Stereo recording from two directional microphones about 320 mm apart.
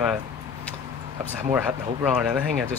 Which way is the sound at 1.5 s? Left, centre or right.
Centre.